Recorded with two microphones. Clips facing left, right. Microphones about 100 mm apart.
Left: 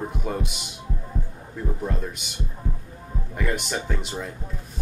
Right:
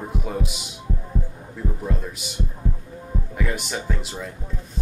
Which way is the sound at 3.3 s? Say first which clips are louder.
Left 1 dB; centre (ahead or behind).